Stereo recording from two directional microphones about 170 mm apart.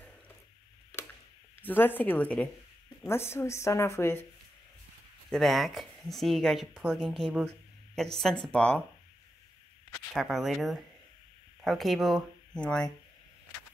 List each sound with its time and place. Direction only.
1.6 s speech: 10° left (ahead or behind)
5.3 s speech: centre (ahead or behind)
10.1 s speech: centre (ahead or behind)